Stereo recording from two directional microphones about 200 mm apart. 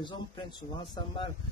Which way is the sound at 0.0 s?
25° left (ahead or behind).